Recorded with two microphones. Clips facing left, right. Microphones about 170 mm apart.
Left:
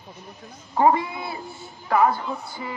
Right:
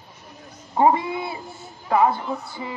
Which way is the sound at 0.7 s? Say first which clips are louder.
Right 1 dB; 25° right (ahead or behind).